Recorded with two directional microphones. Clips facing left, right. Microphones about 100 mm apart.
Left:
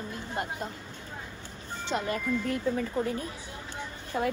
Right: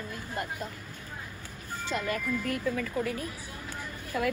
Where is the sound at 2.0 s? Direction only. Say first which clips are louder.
Left 2 dB; 35° left (ahead or behind).